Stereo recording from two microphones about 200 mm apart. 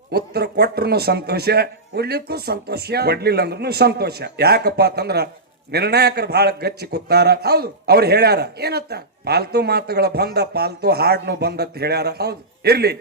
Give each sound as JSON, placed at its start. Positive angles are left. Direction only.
{"t": 0.1, "sound": "a man's voice", "side_deg": -55}